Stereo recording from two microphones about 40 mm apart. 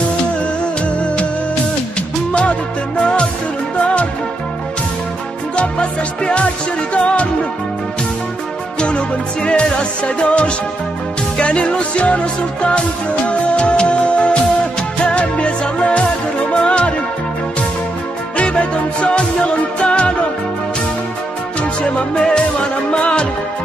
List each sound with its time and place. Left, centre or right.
3.8 s music: left
5.6 s music: left
8.7 s music: left
18.4 s music: left
21.9 s music: centre